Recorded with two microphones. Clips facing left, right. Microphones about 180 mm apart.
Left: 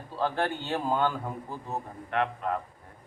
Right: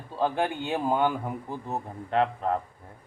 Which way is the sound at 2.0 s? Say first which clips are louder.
Right 4 dB; 30° right (ahead or behind).